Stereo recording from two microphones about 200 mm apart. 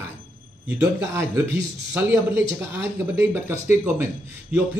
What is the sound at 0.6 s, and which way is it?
A man's voice, 10° right (ahead or behind).